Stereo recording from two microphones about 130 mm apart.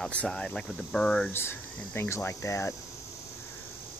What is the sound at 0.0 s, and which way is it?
Speech, 10° left (ahead or behind).